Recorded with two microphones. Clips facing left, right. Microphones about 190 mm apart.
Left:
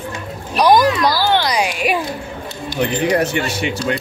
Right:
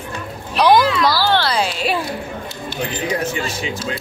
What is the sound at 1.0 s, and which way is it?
Music, 15° left (ahead or behind).